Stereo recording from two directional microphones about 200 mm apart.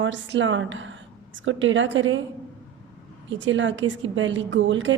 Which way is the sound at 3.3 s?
70° right (ahead or behind).